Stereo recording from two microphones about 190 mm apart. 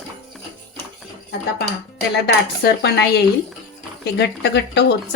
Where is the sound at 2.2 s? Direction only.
60° left (ahead or behind).